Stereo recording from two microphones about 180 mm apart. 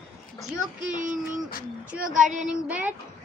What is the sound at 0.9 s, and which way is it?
Speech, 45° right (ahead or behind).